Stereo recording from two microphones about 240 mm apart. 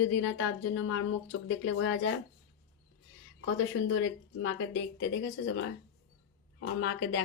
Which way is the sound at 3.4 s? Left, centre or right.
Left.